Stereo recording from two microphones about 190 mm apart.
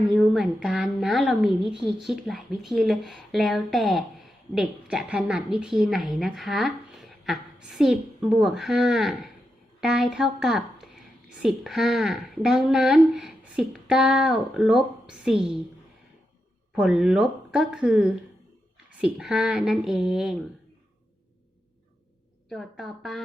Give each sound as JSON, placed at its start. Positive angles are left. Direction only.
{"t": 0.2, "sound": "a woman's voice", "side_deg": -5}
{"t": 16.7, "sound": "a woman's voice", "side_deg": -5}
{"t": 22.4, "sound": "a woman's voice", "side_deg": 0}